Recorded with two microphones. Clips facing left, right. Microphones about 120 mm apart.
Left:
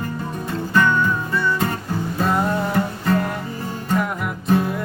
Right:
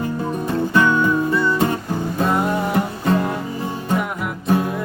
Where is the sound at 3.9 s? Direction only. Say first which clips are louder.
Left 1 dB; 5° right (ahead or behind).